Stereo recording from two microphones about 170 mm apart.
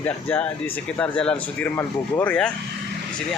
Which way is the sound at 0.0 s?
10° left (ahead or behind).